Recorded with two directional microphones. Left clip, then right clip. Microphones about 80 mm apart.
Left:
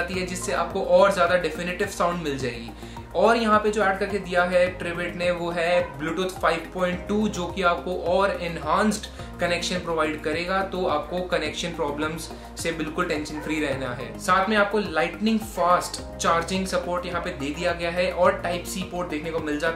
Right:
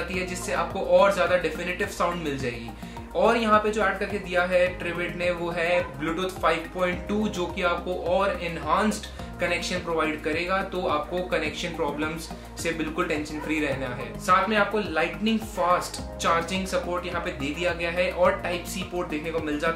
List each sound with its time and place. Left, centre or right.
0.2 s speech: left
12.6 s speech: centre